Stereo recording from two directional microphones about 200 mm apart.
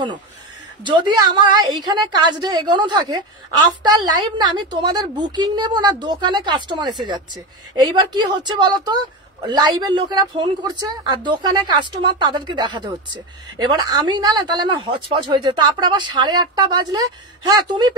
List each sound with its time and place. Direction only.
0.8 s a woman's voice: 25° right (ahead or behind)